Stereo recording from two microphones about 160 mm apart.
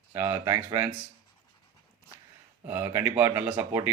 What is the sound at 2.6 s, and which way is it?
A man's voice, 15° right (ahead or behind).